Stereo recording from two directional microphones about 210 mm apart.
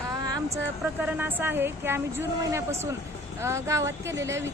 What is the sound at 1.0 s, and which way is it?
A woman's voice, 10° right (ahead or behind).